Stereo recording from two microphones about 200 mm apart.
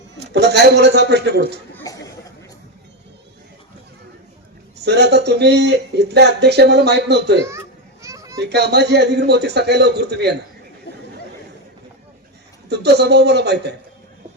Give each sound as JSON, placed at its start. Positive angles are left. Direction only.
{"t": 0.3, "sound": "speech", "side_deg": -55}
{"t": 1.7, "sound": "a sound", "side_deg": 15}
{"t": 4.9, "sound": "speech", "side_deg": -55}
{"t": 8.0, "sound": "a sound", "side_deg": -15}
{"t": 8.4, "sound": "speech", "side_deg": -55}
{"t": 12.6, "sound": "speech", "side_deg": -55}